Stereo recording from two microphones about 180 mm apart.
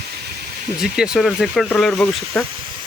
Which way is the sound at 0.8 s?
5° right (ahead or behind).